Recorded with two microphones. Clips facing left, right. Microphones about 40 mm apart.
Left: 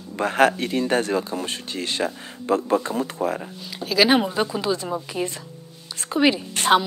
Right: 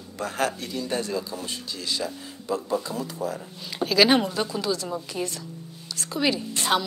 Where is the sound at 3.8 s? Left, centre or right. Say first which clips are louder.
Left 1 dB; centre.